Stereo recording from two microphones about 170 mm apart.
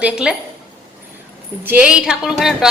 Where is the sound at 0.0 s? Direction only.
5° right (ahead or behind).